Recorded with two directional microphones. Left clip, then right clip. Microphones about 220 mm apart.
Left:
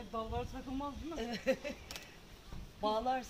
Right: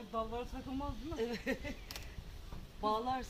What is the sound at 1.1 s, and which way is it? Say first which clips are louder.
Speech: left 3 dB; 25° left (ahead or behind).